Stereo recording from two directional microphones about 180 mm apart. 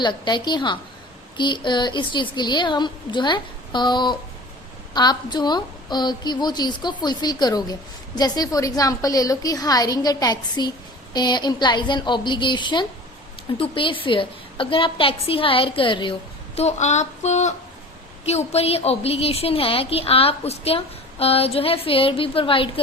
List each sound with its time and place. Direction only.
0.0 s a woman's voice: 25° left (ahead or behind)
16.6 s a woman's voice: 40° left (ahead or behind)